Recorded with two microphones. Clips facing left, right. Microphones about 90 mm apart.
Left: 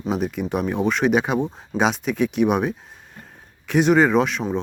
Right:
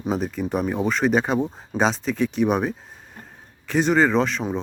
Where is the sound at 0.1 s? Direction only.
5° left (ahead or behind).